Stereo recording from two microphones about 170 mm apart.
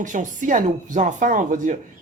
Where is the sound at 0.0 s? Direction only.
50° right (ahead or behind).